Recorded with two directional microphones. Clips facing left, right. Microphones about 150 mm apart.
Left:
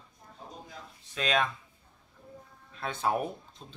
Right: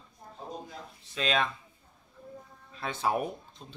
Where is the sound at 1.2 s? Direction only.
5° left (ahead or behind).